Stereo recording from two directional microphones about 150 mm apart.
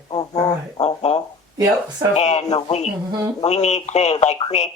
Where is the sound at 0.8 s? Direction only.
45° left (ahead or behind).